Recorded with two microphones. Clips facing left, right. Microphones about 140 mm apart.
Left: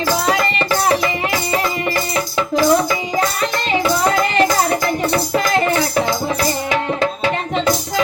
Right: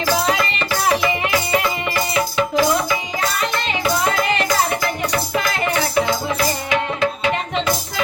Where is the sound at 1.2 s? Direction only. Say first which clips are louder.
Even; 35° left (ahead or behind).